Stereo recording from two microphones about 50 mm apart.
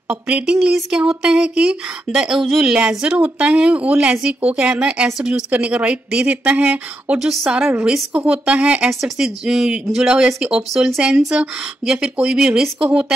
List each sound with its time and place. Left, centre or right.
0.1 s speech: right
2.1 s a woman's voice: centre
7.2 s a woman's voice: centre
7.8 s speech: centre
9.0 s a woman's voice: centre